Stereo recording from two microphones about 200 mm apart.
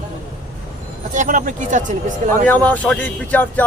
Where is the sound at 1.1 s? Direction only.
40° right (ahead or behind).